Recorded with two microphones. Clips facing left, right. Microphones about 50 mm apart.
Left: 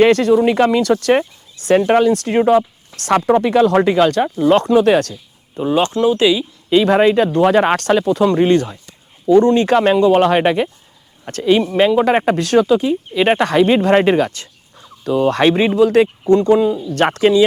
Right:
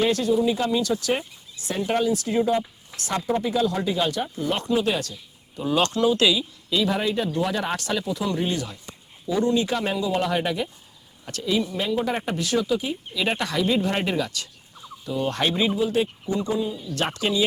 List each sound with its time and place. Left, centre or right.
0.0 s speech: left
5.5 s speech: left
6.7 s speech: left
15.0 s speech: left
16.2 s speech: left
16.9 s speech: left